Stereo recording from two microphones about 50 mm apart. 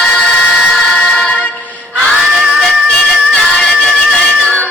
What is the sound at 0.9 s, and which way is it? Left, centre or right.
Music, centre.